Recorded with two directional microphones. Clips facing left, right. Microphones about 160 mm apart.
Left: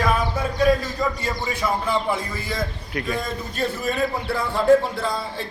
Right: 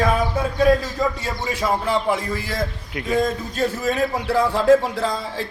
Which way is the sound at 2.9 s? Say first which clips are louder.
Right 1 dB; 20° right (ahead or behind).